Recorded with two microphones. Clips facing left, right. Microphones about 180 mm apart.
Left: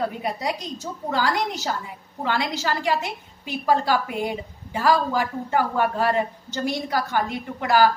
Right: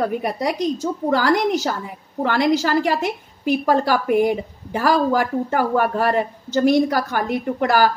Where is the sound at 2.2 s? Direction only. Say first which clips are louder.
Right 7 dB; 45° right (ahead or behind).